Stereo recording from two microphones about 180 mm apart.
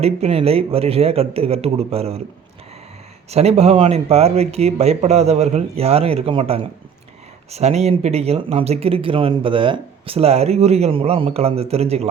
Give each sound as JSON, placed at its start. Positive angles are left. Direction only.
{"t": 0.0, "sound": "speech", "side_deg": -35}
{"t": 3.2, "sound": "speech", "side_deg": -35}